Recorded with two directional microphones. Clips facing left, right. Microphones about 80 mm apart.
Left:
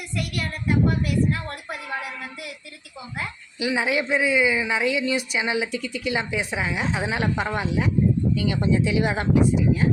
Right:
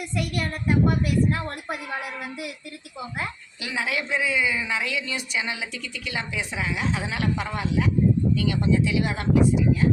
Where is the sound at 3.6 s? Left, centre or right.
Left.